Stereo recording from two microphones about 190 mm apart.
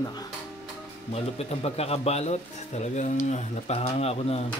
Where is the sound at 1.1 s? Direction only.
35° left (ahead or behind).